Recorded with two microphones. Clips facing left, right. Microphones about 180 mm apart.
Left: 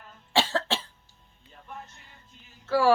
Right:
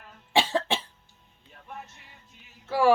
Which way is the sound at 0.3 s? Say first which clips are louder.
Right 2 dB; 15° right (ahead or behind).